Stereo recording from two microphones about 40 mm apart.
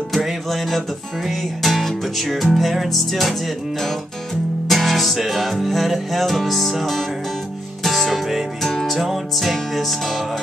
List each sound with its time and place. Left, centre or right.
0.1 s music: centre
4.6 s music: centre
8.9 s music: centre